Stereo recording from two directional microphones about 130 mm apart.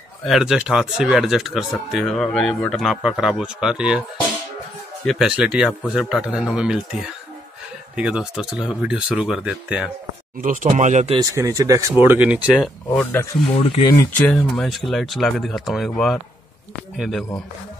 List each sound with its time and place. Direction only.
0.2 s speech: centre (ahead or behind)
5.0 s speech: centre (ahead or behind)
10.4 s speech: 90° right; by 11.1 s 65° right (ahead or behind)
11.1 s speech: 25° right (ahead or behind)
11.9 s speech: 15° right (ahead or behind)
13.0 s speech: 15° left (ahead or behind)
14.5 s speech: centre (ahead or behind)